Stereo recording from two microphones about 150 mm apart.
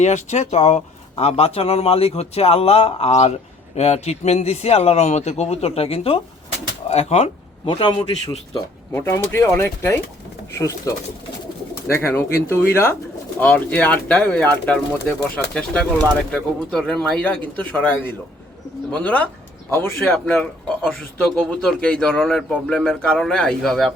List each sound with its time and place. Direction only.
0.0 s speech: 50° left (ahead or behind)
6.8 s a sound: 45° left (ahead or behind)
7.7 s a man's voice: 30° left (ahead or behind)
8.5 s speech: 15° left (ahead or behind)
11.9 s speech: 15° left (ahead or behind)